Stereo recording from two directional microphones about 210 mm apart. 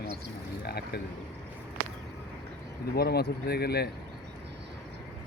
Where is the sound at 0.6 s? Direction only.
50° left (ahead or behind).